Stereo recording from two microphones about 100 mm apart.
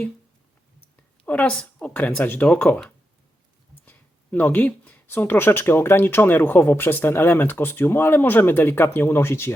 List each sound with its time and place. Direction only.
1.2 s speech: 15° left (ahead or behind)